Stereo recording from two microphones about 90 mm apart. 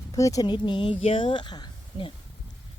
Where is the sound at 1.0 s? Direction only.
80° left; by 1.7 s 55° left (ahead or behind).